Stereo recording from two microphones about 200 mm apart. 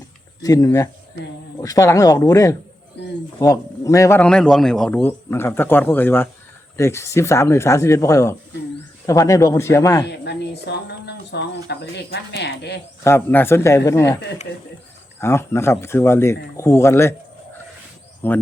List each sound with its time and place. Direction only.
0.4 s a man's voice: 15° left (ahead or behind)
3.0 s a sound: 60° left (ahead or behind)
3.4 s a man's voice: 15° left (ahead or behind)
10.2 s speech: 60° left (ahead or behind)
13.1 s a man's voice: 10° left (ahead or behind)
15.2 s a man's voice: 10° left (ahead or behind)
18.2 s a man's voice: 10° left (ahead or behind)